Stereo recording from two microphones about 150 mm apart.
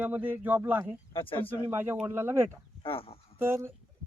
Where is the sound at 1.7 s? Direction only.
15° right (ahead or behind).